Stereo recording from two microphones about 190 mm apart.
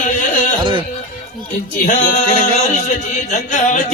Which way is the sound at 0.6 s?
25° right (ahead or behind).